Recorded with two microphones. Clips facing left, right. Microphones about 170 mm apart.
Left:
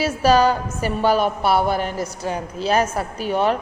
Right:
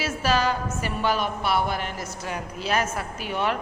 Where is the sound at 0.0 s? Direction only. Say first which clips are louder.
Left 8 dB; 35° left (ahead or behind).